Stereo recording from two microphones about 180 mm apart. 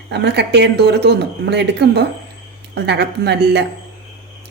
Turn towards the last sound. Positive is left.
turn(degrees=-65)  # may be behind; listen again after turning